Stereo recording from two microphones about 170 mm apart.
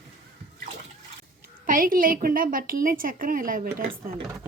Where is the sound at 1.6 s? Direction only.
55° right (ahead or behind).